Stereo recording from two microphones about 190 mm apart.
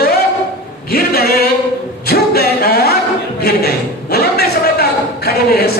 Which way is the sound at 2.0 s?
55° left (ahead or behind).